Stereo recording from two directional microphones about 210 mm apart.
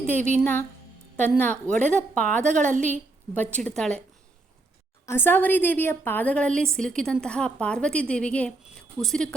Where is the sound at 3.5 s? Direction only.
5° left (ahead or behind).